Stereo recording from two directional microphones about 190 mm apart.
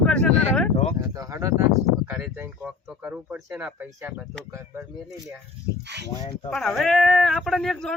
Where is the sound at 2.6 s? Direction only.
5° right (ahead or behind).